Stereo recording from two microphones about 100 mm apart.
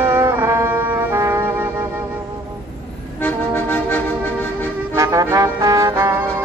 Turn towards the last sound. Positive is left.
turn(degrees=-35)  # may be behind; listen again after turning